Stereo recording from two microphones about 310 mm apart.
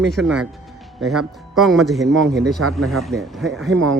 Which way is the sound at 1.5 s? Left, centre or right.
Centre.